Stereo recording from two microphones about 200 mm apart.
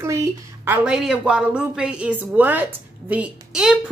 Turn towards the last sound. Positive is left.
turn(degrees=-5)  # may be behind; listen again after turning